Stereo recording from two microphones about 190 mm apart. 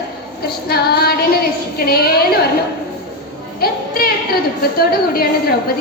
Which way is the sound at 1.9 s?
55° left (ahead or behind).